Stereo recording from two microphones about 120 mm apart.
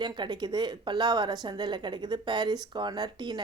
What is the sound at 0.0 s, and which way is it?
Speech, 40° right (ahead or behind).